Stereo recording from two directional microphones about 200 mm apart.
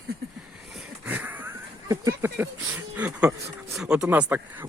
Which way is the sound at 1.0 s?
10° right (ahead or behind).